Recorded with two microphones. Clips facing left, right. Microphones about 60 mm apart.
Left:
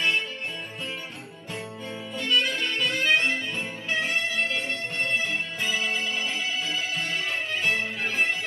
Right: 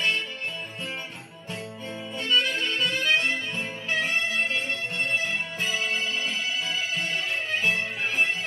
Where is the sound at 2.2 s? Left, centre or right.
Right.